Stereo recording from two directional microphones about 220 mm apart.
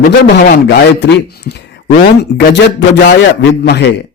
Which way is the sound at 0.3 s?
45° left (ahead or behind).